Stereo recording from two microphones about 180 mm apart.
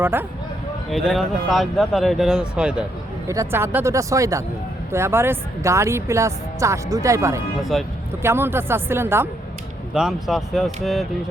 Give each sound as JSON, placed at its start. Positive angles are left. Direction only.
{"t": 0.0, "sound": "speech", "side_deg": -10}
{"t": 0.9, "sound": "speech", "side_deg": 0}
{"t": 7.7, "sound": "speech", "side_deg": 0}
{"t": 8.2, "sound": "speech", "side_deg": -15}
{"t": 9.9, "sound": "speech", "side_deg": 0}